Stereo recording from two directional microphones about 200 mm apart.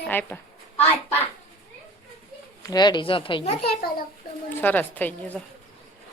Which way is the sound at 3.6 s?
50° left (ahead or behind).